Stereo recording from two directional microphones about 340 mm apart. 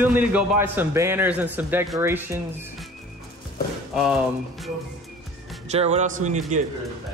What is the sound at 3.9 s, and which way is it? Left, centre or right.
Speech, centre.